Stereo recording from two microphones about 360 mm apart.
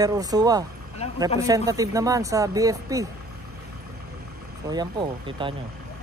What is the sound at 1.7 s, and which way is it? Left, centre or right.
Speech, centre.